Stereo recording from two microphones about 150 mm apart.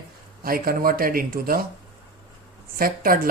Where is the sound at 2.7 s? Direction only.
75° right (ahead or behind).